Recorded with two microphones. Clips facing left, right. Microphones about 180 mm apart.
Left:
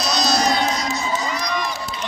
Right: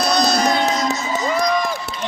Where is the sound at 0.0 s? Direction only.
55° right (ahead or behind).